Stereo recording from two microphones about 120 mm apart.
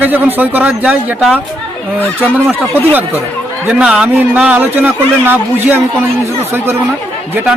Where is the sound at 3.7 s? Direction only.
5° right (ahead or behind).